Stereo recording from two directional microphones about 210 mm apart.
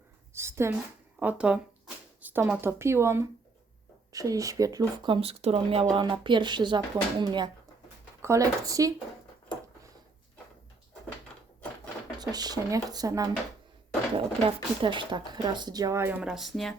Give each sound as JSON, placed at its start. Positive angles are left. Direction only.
{"t": 0.3, "sound": "speech", "side_deg": -10}
{"t": 12.2, "sound": "speech", "side_deg": -20}
{"t": 14.4, "sound": "speech", "side_deg": -25}